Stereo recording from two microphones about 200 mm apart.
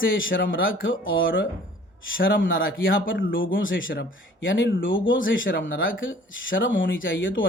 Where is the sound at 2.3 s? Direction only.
70° left (ahead or behind).